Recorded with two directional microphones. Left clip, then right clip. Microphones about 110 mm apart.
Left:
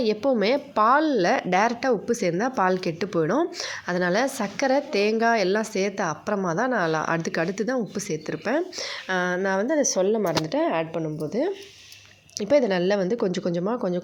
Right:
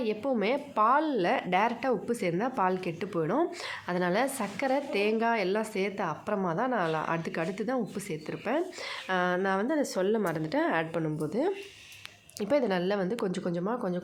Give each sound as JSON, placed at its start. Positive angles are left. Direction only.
{"t": 0.0, "sound": "a woman's voice", "side_deg": 45}